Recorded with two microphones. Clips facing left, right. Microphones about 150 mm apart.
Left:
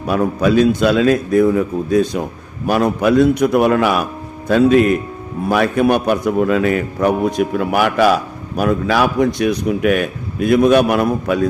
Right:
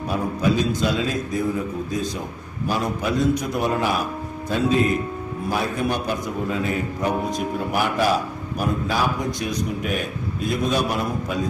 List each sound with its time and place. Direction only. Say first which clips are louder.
0.1 s a man's voice: left 8 dB; 75° left (ahead or behind)